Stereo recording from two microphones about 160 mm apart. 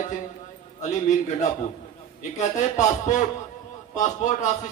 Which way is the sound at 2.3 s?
50° left (ahead or behind).